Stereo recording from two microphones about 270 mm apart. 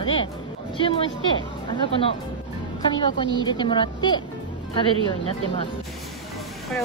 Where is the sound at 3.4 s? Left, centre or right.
Centre.